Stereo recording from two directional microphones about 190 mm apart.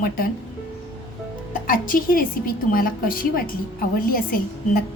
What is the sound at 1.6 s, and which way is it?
A woman's voice, 45° left (ahead or behind).